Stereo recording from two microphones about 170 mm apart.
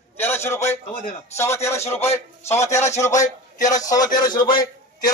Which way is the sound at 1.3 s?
15° left (ahead or behind).